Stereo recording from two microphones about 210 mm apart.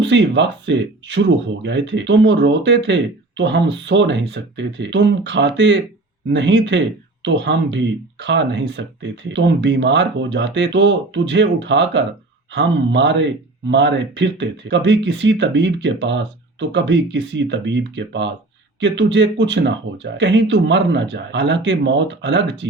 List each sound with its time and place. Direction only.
0.0 s speech: 60° right (ahead or behind)